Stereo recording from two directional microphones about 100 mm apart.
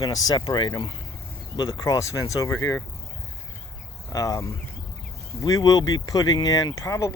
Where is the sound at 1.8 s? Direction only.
35° left (ahead or behind).